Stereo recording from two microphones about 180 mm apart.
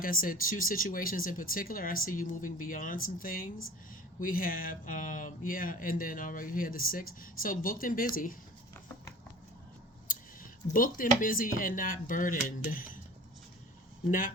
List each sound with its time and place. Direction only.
0.0 s speech: 50° left (ahead or behind)
10.1 s speech: 50° left (ahead or behind)
14.1 s speech: 50° left (ahead or behind)